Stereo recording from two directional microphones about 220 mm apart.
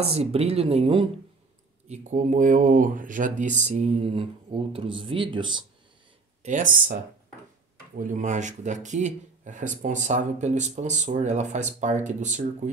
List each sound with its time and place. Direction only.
0.0 s speech: 30° right (ahead or behind)
6.4 s speech: 35° right (ahead or behind)
8.1 s speech: 35° right (ahead or behind)